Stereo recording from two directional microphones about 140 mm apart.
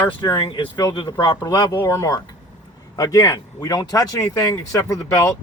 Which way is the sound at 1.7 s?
20° left (ahead or behind).